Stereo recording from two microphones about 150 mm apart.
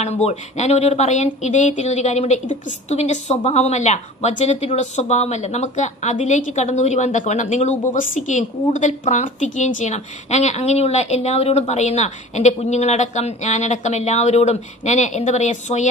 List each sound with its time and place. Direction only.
0.0 s a woman's voice: 50° left (ahead or behind)